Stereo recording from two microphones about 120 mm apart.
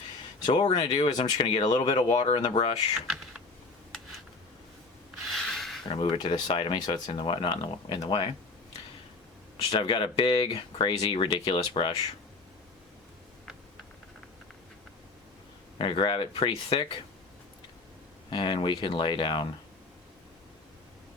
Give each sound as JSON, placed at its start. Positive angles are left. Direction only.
{"t": 0.5, "sound": "speech", "side_deg": 35}
{"t": 1.2, "sound": "speech", "side_deg": 55}
{"t": 1.6, "sound": "speech", "side_deg": 35}
{"t": 2.2, "sound": "speech", "side_deg": 50}
{"t": 5.3, "sound": "a sound", "side_deg": 0}
{"t": 5.9, "sound": "speech", "side_deg": 45}
{"t": 9.6, "sound": "speech", "side_deg": 45}
{"t": 15.8, "sound": "speech", "side_deg": 45}
{"t": 18.3, "sound": "speech", "side_deg": 40}